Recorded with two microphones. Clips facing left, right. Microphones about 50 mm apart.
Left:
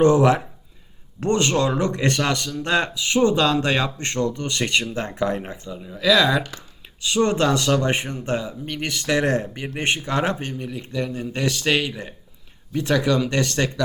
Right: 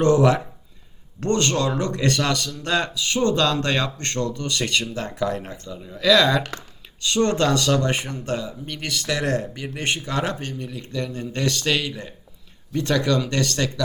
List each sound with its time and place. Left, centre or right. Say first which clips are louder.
0.0 s speech: left 1 dB; centre